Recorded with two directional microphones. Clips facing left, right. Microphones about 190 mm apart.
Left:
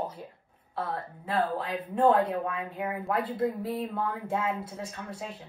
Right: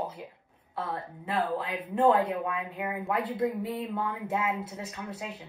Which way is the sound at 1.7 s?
10° right (ahead or behind).